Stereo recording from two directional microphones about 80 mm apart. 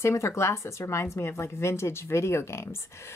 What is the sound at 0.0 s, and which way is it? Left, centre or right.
Speech, left.